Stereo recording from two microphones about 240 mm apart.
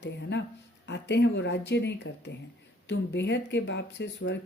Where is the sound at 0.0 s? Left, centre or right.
Left.